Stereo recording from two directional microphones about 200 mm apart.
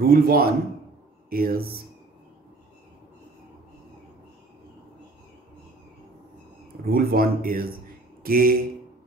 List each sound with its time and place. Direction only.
0.0 s speech: 45° right (ahead or behind)
6.9 s speech: 50° right (ahead or behind)